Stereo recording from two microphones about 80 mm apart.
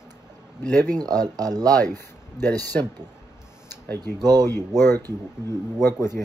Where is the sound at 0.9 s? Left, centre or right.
Right.